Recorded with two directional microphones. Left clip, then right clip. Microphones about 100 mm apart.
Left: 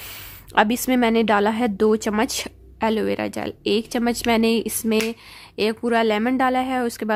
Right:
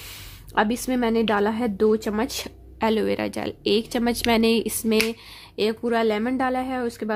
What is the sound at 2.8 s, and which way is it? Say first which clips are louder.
Speech: left 1 dB; 20° left (ahead or behind).